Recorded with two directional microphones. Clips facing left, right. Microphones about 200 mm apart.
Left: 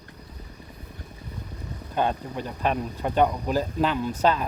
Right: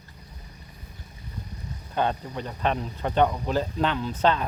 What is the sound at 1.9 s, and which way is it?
Speech, 10° left (ahead or behind).